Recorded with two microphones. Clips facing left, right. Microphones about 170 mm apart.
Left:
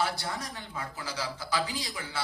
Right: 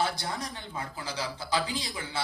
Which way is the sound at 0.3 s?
25° right (ahead or behind).